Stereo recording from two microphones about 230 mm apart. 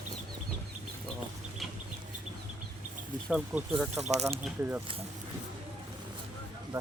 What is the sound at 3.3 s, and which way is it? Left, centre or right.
Speech, centre.